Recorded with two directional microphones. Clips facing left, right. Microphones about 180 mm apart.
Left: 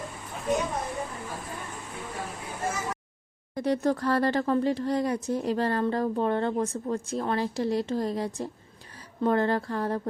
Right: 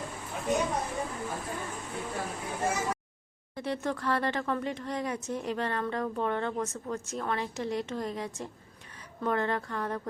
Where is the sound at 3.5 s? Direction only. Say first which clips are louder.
Left 7 dB; 40° left (ahead or behind).